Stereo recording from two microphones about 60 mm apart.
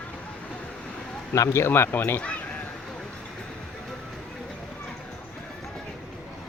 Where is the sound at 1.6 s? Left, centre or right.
Left.